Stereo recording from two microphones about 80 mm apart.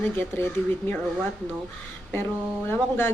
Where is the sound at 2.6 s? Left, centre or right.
Left.